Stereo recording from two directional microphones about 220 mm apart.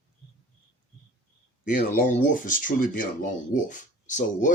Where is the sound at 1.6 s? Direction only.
35° left (ahead or behind).